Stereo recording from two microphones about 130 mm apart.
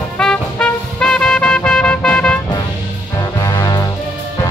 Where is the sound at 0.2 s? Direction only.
5° left (ahead or behind).